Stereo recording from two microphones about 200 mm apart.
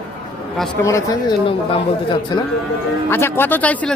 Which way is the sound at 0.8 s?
15° left (ahead or behind).